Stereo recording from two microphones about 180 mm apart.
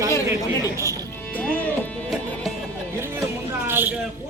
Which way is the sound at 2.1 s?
Centre (ahead or behind).